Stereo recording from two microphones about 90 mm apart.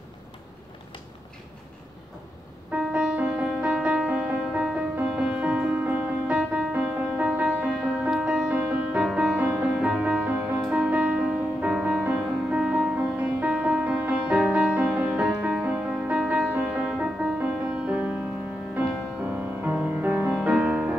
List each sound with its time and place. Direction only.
2.7 s music: 10° right (ahead or behind)